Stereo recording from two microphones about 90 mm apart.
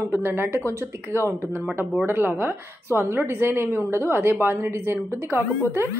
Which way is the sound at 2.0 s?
25° right (ahead or behind).